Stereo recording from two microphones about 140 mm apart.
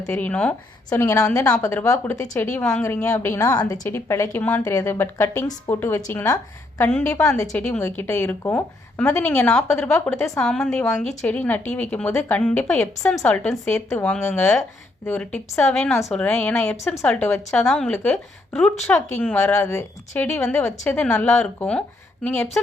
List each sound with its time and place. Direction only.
0.0 s a woman's voice: 15° left (ahead or behind)
7.5 s a woman's voice: 15° left (ahead or behind)
10.3 s a woman's voice: 5° left (ahead or behind)
17.6 s a woman's voice: 5° left (ahead or behind)